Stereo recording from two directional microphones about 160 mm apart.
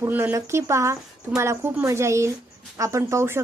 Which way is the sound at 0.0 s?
15° right (ahead or behind).